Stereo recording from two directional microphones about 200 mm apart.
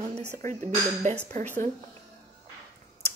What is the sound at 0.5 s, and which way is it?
Speech, 35° right (ahead or behind).